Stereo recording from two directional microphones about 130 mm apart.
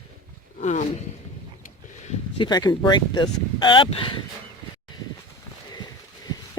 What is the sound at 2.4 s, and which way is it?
Speech, 30° left (ahead or behind).